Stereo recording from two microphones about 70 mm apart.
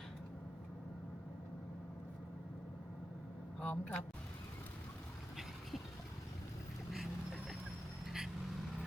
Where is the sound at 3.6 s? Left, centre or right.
Left.